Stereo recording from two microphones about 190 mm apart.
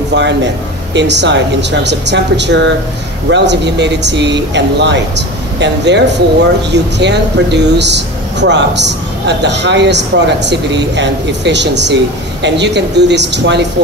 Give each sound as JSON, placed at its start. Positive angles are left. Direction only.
{"t": 0.1, "sound": "a man's voice", "side_deg": -65}